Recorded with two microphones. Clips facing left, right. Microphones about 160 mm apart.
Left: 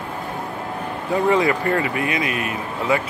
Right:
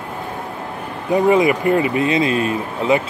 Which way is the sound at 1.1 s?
15° right (ahead or behind).